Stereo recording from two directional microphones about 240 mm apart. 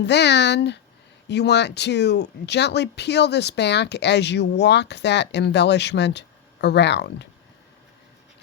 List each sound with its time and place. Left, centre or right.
0.0 s speech: left